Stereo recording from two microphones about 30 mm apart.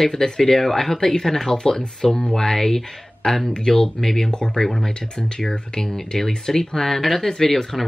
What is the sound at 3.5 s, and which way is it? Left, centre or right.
Speech, left.